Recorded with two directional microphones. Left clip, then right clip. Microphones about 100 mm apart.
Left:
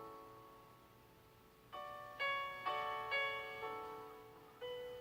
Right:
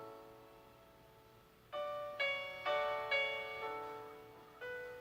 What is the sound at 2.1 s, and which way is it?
Music, 30° right (ahead or behind).